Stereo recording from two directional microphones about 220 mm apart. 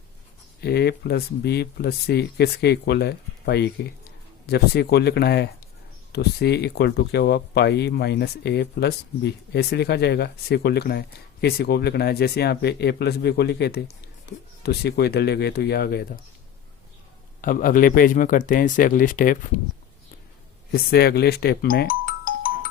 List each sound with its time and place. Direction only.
0.6 s speech: 45° left (ahead or behind)
17.4 s speech: 40° left (ahead or behind)
20.7 s speech: 45° left (ahead or behind)